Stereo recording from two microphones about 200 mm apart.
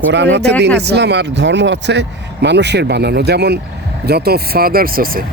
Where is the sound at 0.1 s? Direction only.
60° right (ahead or behind).